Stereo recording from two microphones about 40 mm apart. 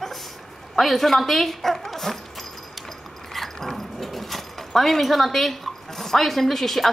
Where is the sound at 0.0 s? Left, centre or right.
Centre.